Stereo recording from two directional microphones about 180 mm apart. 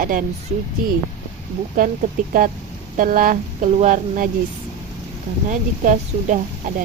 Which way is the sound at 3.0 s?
50° right (ahead or behind).